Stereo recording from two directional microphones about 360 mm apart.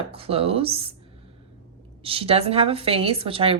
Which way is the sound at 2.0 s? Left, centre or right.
Centre.